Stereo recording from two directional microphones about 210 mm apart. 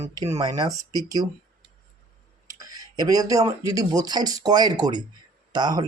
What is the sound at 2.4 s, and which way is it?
Speech, 15° right (ahead or behind).